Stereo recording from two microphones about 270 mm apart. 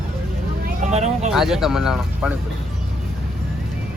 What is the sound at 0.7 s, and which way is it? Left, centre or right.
Speech, right.